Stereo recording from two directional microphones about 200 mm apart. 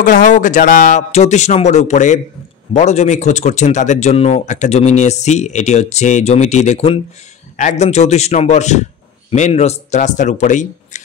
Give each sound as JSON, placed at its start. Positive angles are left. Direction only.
{"t": 0.0, "sound": "speech", "side_deg": 40}